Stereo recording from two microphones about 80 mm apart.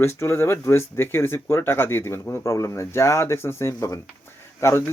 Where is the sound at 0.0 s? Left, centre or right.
Left.